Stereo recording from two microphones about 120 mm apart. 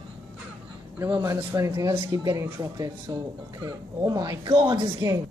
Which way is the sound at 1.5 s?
25° right (ahead or behind).